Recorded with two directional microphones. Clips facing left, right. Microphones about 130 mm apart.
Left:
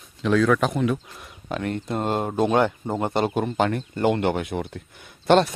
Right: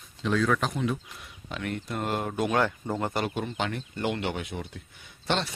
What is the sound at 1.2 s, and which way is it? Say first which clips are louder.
Speech: left 7 dB; 45° left (ahead or behind).